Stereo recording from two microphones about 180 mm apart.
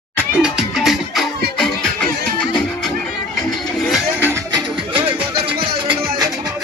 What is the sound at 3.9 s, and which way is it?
Music, 10° right (ahead or behind).